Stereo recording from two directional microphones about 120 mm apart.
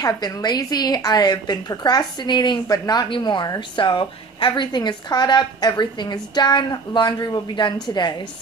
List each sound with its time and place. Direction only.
0.0 s a woman's voice: 35° left (ahead or behind)